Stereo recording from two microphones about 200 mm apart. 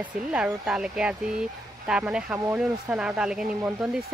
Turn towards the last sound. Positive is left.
turn(degrees=0)  # may be behind; listen again after turning